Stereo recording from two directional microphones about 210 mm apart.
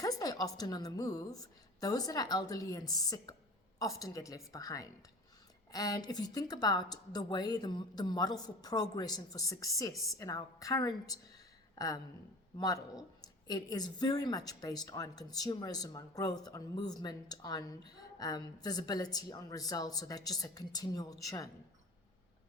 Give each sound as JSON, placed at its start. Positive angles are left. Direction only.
{"t": 0.0, "sound": "speech", "side_deg": 15}
{"t": 11.7, "sound": "a sound", "side_deg": 15}
{"t": 12.5, "sound": "speech", "side_deg": 15}